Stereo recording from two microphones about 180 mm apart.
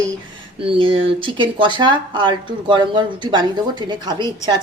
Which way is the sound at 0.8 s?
30° right (ahead or behind).